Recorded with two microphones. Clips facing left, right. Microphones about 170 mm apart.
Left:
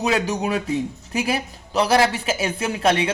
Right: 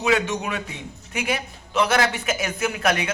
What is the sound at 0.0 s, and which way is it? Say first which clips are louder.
A man's voice: left 1 dB; 35° left (ahead or behind).